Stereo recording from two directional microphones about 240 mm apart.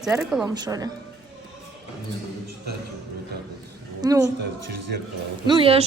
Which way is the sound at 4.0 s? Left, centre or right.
Centre.